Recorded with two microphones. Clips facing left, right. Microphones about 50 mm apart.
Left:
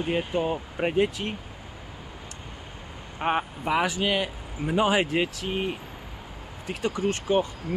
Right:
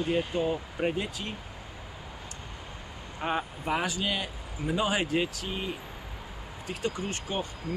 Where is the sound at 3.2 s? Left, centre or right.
Left.